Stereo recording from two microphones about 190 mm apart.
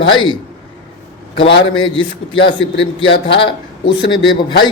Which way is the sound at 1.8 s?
25° left (ahead or behind).